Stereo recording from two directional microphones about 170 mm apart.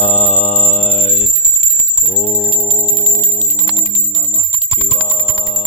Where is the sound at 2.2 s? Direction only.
45° left (ahead or behind).